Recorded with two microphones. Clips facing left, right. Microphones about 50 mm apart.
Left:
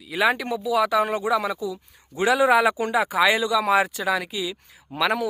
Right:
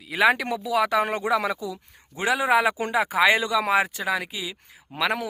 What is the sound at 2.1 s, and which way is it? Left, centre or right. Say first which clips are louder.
A man's voice: left 3 dB; right.